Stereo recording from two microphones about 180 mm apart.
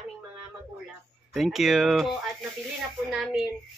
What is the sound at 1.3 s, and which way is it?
Speech, centre (ahead or behind).